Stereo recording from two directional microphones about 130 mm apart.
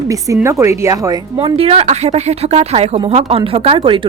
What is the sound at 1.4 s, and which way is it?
Speech, 50° right (ahead or behind).